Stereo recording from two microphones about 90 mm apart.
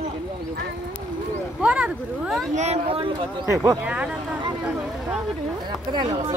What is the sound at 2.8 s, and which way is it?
Speech, 90° right.